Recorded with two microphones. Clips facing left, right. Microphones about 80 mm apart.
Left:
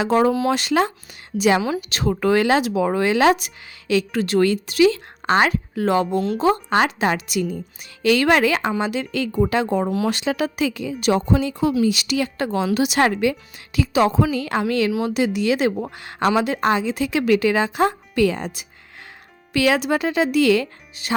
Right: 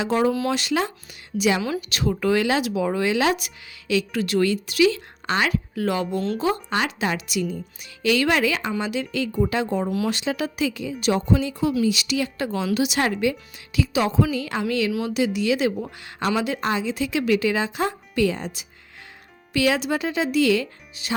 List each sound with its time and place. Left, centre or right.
0.0 s speech: left
6.1 s speech: centre
6.4 s speech: left
13.7 s speech: left